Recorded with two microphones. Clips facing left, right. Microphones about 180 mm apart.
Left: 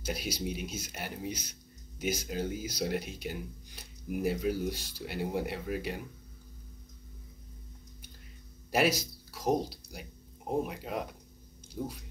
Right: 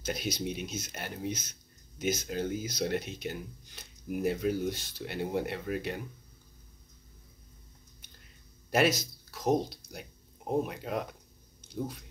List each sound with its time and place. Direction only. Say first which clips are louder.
0.0 s speech: right 1 dB; 10° left (ahead or behind)
8.7 s speech: right 1 dB; 10° left (ahead or behind)